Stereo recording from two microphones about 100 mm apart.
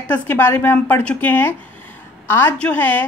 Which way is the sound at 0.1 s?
20° left (ahead or behind).